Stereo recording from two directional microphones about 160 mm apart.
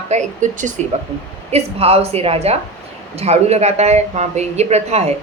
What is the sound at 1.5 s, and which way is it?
A woman's voice, 40° right (ahead or behind).